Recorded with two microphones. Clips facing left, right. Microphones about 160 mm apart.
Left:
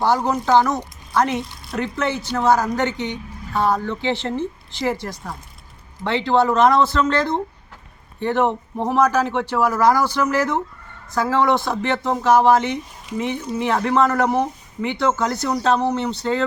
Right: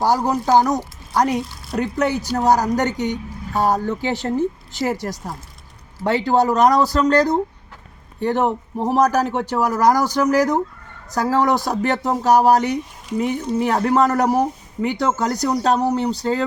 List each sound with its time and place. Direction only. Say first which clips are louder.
0.3 s speech: right 1 dB; 40° right (ahead or behind)
1.4 s speech: right 3 dB; centre (ahead or behind)
1.8 s speech: right 3 dB; 40° right (ahead or behind)